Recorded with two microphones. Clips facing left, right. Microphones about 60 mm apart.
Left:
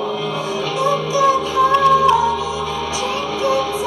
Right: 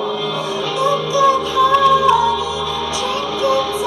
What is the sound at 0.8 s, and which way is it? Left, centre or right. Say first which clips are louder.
Music: right 2 dB; left.